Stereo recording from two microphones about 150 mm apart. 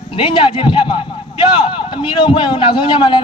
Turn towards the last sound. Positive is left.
turn(degrees=30)  # may be behind; listen again after turning